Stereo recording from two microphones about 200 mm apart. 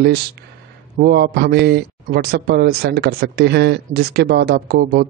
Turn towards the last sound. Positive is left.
turn(degrees=-45)  # may be behind; listen again after turning